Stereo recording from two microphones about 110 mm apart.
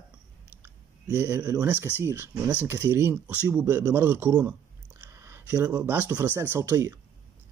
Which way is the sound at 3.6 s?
25° right (ahead or behind).